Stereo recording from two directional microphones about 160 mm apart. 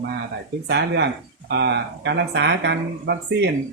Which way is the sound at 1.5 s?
90° right.